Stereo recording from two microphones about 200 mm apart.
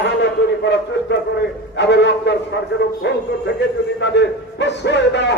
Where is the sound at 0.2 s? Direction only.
60° left (ahead or behind).